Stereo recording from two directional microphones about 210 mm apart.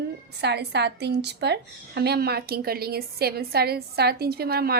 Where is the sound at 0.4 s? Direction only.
55° right (ahead or behind).